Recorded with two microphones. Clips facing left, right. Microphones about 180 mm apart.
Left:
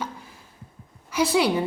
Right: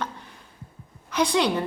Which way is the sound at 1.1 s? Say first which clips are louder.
Left 1 dB; 5° left (ahead or behind).